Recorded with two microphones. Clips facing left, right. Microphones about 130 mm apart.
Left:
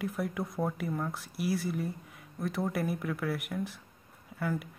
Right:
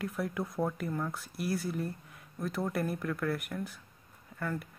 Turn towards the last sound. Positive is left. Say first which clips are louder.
# left 3 dB
turn(degrees=5)  # may be behind; listen again after turning